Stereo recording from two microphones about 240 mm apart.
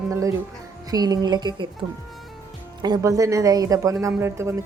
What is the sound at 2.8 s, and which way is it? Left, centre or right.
Speech, centre.